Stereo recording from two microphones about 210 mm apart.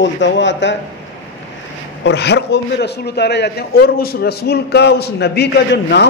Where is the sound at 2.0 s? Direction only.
55° left (ahead or behind).